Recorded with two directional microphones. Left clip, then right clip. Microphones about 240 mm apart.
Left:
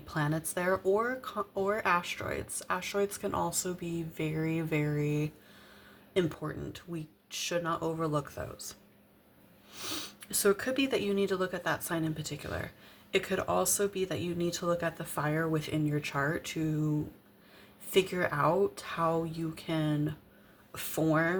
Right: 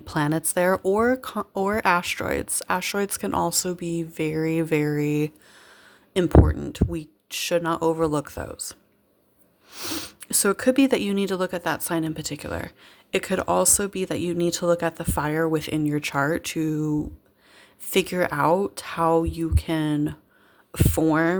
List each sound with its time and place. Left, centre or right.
0.0 s speech: right
17.9 s speech: right